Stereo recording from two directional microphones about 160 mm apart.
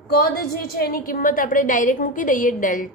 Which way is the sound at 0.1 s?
70° left (ahead or behind).